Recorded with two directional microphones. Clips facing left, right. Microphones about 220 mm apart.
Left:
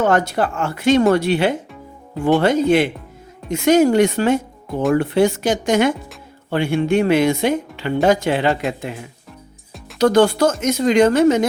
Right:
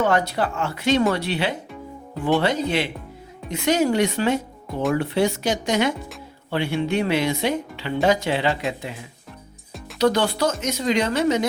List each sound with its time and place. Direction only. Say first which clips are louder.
0.0 s speech: left 4 dB; 50° left (ahead or behind)